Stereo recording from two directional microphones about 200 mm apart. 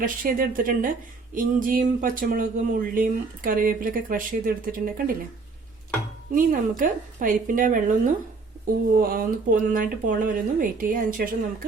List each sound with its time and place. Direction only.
0.0 s speech: 45° right (ahead or behind)
6.3 s speech: 45° right (ahead or behind)